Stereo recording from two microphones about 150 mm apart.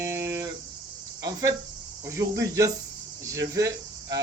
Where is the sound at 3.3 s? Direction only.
20° right (ahead or behind).